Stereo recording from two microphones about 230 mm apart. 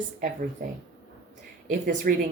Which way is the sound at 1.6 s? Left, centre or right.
Right.